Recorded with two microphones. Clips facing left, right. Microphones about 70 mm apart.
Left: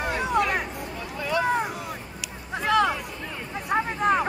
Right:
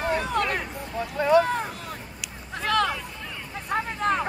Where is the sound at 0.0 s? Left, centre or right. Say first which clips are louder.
Left 1 dB; centre.